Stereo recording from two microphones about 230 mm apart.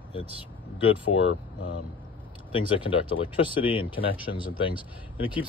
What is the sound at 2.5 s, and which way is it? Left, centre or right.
Speech, left.